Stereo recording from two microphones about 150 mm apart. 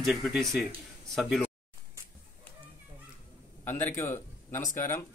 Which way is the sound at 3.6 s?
15° left (ahead or behind).